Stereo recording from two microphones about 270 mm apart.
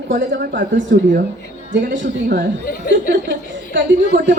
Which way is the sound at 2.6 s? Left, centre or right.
Left.